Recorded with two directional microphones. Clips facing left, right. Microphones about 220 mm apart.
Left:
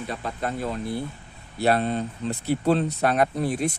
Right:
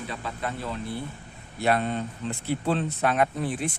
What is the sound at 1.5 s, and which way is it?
Speech, 35° left (ahead or behind).